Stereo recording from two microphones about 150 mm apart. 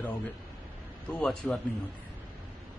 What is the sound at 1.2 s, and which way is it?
Speech, 5° left (ahead or behind).